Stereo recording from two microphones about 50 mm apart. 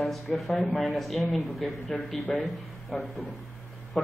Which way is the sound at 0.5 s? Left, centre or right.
Left.